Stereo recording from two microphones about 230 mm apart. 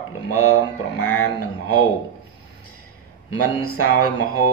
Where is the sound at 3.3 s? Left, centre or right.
Left.